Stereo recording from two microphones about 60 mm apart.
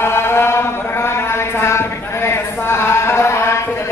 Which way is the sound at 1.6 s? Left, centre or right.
Left.